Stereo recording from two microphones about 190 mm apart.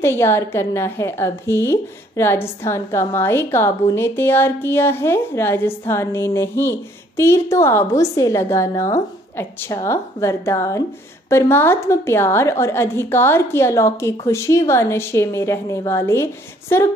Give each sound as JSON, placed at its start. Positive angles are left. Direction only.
{"t": 0.0, "sound": "a woman's voice", "side_deg": 15}